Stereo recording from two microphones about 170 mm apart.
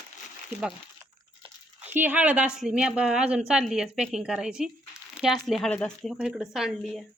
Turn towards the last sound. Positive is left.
turn(degrees=0)  # may be behind; listen again after turning